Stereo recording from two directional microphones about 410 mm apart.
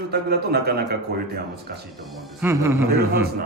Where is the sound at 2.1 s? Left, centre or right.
Centre.